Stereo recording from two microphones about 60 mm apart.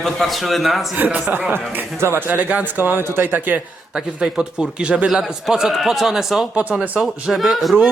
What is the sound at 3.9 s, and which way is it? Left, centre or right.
Speech, centre.